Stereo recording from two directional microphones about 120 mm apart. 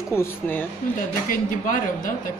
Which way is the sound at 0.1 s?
20° left (ahead or behind).